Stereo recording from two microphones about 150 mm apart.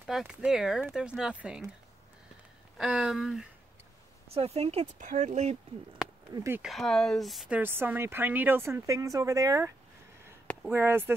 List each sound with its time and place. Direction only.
0.0 s speech: 5° right (ahead or behind)
2.8 s speech: 5° right (ahead or behind)
4.3 s speech: 40° right (ahead or behind)
4.9 s speech: 55° right (ahead or behind)
6.0 s a sound: 5° right (ahead or behind)
6.3 s speech: 20° right (ahead or behind)
6.6 s speech: centre (ahead or behind); by 11.1 s 15° right (ahead or behind)